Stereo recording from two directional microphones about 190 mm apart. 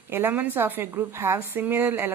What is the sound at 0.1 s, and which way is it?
Speech, 10° right (ahead or behind).